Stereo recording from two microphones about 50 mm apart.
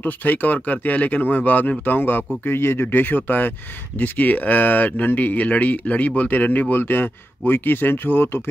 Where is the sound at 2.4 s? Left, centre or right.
Left.